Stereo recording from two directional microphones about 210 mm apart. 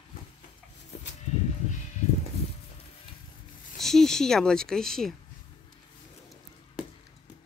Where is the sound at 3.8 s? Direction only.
Centre (ahead or behind).